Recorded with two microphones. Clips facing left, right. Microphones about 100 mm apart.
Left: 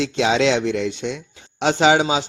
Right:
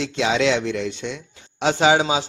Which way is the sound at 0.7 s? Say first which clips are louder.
Left 3 dB; 65° left (ahead or behind).